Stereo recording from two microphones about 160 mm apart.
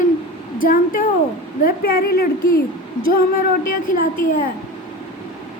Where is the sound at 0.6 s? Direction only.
60° left (ahead or behind).